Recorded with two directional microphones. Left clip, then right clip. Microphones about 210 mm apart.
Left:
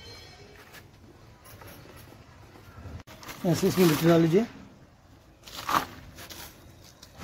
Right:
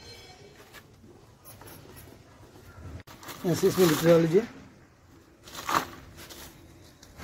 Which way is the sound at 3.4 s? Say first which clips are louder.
Left 1 dB; 35° left (ahead or behind).